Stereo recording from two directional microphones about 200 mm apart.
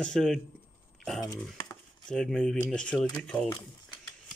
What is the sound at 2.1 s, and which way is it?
Speech, 5° left (ahead or behind).